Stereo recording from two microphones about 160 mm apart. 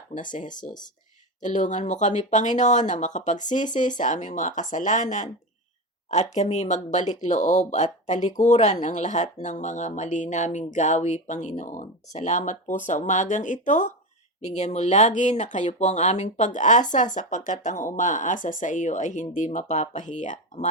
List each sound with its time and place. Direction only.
0.2 s speech: 55° left (ahead or behind)